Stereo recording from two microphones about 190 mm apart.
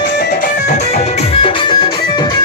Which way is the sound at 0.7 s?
35° left (ahead or behind).